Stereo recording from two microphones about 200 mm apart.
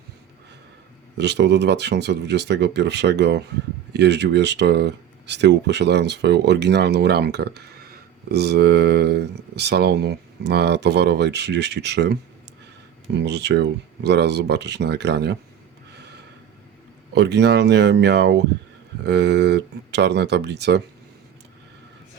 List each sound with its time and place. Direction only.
1.1 s speech: 55° right (ahead or behind)
13.1 s speech: 60° right (ahead or behind)
17.2 s speech: 60° right (ahead or behind)